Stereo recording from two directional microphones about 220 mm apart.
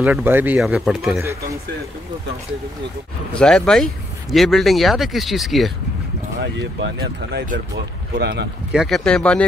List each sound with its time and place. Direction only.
0.0 s speech: 10° right (ahead or behind)
3.3 s speech: 5° left (ahead or behind)
6.4 s speech: 55° right (ahead or behind)
8.7 s speech: centre (ahead or behind)